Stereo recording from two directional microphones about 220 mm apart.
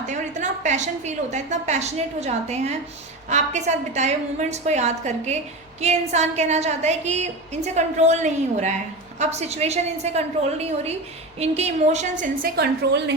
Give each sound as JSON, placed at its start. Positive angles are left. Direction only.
{"t": 0.1, "sound": "a woman's voice", "side_deg": -35}